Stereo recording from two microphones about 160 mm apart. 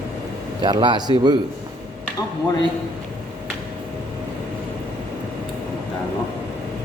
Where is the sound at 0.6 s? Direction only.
30° right (ahead or behind).